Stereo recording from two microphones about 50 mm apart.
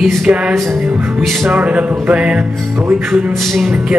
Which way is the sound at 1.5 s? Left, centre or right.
Right.